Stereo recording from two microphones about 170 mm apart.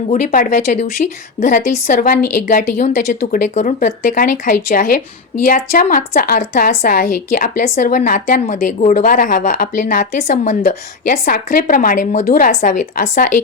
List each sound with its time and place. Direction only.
0.1 s a woman's voice: 50° left (ahead or behind)
6.4 s a woman's voice: 45° left (ahead or behind)
6.7 s a woman's voice: 60° left (ahead or behind)